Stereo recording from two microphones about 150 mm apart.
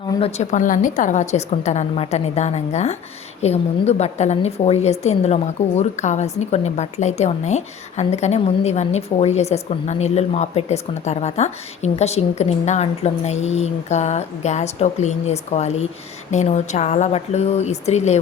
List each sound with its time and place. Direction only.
0.2 s a woman's voice: 45° left (ahead or behind)